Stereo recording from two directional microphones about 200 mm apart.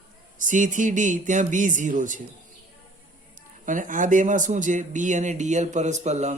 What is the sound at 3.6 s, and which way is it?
A man's voice, 40° right (ahead or behind).